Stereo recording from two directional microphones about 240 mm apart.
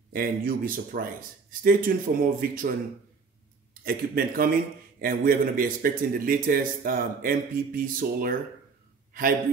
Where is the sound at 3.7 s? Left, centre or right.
Right.